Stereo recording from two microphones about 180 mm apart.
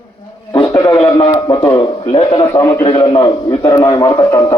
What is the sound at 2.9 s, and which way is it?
A man's voice, 25° left (ahead or behind).